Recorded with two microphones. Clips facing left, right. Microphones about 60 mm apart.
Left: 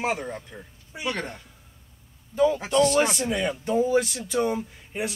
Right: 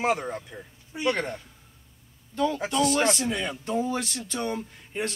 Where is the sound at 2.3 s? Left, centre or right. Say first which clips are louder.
Left 5 dB; centre.